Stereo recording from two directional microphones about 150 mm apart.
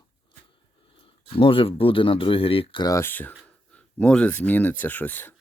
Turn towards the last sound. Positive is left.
turn(degrees=15)  # may be behind; listen again after turning